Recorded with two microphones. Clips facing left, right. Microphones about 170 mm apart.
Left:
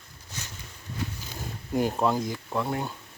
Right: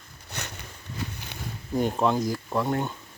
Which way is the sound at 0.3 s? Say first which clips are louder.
Right 4 dB; 65° right (ahead or behind).